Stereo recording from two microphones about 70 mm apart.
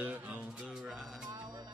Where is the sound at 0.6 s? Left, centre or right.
Centre.